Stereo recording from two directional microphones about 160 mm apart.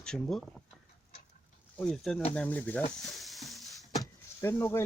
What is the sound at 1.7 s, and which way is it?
Speech, 5° left (ahead or behind).